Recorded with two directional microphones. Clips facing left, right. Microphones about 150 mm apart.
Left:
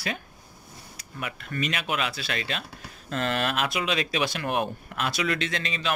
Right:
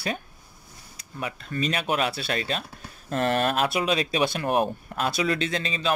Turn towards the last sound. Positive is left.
turn(degrees=-35)  # may be behind; listen again after turning